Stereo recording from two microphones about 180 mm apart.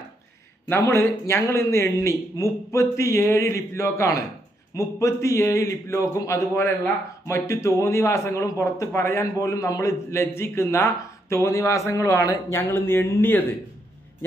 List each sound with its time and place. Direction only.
0.7 s a man's voice: 15° left (ahead or behind)